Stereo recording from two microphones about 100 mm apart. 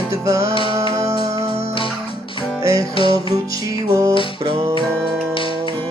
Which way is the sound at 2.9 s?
60° left (ahead or behind).